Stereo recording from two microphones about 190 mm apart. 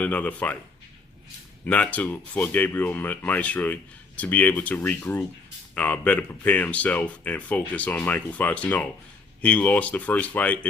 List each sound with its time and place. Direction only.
0.0 s speech: 10° left (ahead or behind)
1.6 s speech: 10° left (ahead or behind)